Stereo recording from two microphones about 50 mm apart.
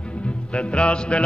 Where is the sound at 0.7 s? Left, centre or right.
Left.